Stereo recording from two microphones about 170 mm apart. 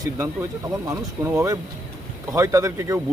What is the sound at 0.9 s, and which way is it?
Speech, 15° right (ahead or behind).